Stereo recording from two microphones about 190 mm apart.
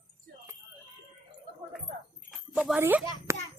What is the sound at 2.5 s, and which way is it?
Speech, 5° right (ahead or behind).